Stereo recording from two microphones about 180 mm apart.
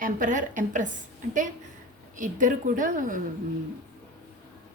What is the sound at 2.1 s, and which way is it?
Speech, 45° right (ahead or behind).